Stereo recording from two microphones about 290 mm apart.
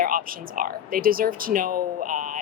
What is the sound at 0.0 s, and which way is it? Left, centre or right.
Speech, right.